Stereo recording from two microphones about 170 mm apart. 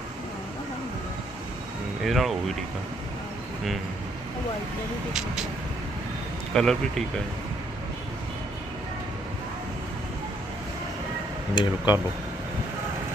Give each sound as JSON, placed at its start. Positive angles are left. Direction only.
{"t": 2.0, "sound": "speech", "side_deg": 0}
{"t": 6.5, "sound": "speech", "side_deg": 5}
{"t": 11.5, "sound": "speech", "side_deg": 25}